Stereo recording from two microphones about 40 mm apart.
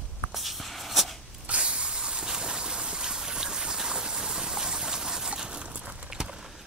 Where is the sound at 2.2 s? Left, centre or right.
Centre.